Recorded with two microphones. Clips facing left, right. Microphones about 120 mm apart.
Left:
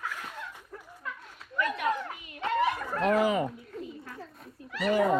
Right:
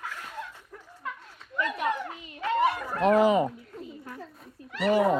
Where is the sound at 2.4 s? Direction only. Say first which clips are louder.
Right 2 dB; 25° left (ahead or behind).